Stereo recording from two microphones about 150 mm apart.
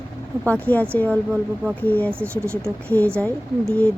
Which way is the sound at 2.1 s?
15° right (ahead or behind).